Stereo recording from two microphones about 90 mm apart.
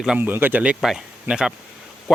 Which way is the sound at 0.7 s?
5° right (ahead or behind).